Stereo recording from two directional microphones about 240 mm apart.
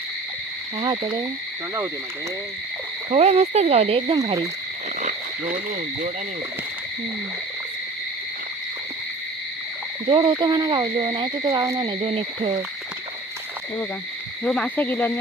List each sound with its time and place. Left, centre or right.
3.1 s speech: right
10.1 s speech: right
14.4 s cricket: centre